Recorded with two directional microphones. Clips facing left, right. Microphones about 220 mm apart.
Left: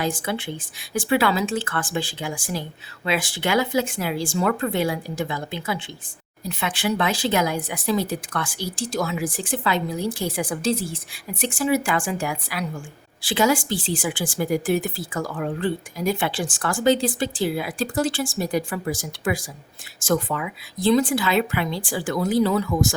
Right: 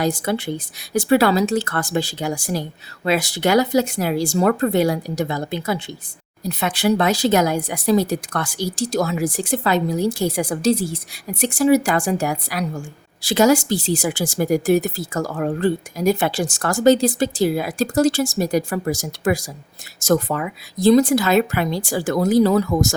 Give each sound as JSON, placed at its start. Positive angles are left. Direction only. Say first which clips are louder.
{"t": 0.0, "sound": "a woman's voice", "louder": "right 5 dB", "side_deg": -40}